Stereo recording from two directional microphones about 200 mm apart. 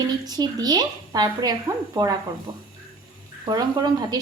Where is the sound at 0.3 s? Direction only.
20° right (ahead or behind).